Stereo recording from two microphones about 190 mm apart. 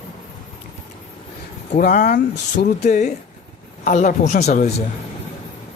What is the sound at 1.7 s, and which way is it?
Speech, 45° left (ahead or behind).